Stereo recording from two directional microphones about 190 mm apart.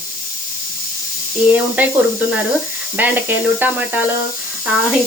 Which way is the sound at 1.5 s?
10° right (ahead or behind).